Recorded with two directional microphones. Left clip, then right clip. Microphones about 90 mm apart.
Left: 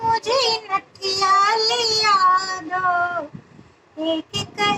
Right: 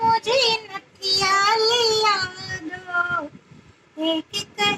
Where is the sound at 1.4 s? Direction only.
45° left (ahead or behind).